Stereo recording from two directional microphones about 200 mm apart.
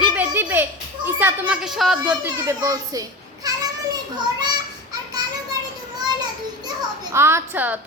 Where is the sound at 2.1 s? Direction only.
15° right (ahead or behind).